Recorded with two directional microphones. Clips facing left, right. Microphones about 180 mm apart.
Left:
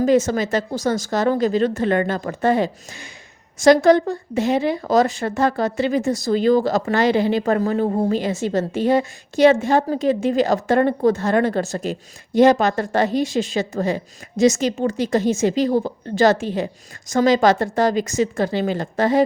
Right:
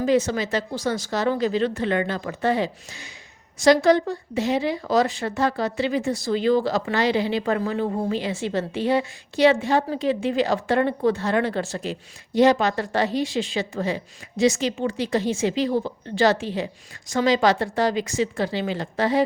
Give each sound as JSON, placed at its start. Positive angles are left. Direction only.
{"t": 0.0, "sound": "speech", "side_deg": 45}